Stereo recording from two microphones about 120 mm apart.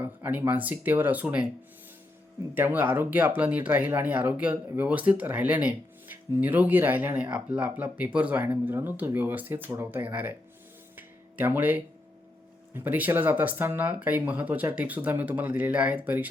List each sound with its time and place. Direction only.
0.0 s speech: 15° right (ahead or behind)
2.6 s speech: 15° right (ahead or behind)
10.9 s a sound: 15° right (ahead or behind)
12.7 s speech: 15° right (ahead or behind)